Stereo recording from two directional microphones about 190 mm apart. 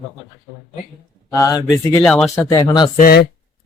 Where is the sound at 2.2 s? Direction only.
15° left (ahead or behind).